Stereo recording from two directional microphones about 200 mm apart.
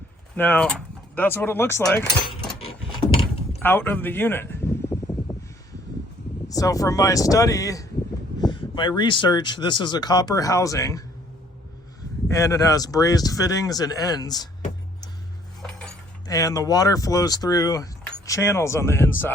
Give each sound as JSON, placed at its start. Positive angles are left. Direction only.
{"t": 0.3, "sound": "speech", "side_deg": 10}
{"t": 3.6, "sound": "a sound", "side_deg": 10}
{"t": 6.5, "sound": "speech", "side_deg": 15}
{"t": 12.3, "sound": "speech", "side_deg": 15}
{"t": 16.2, "sound": "speech", "side_deg": 15}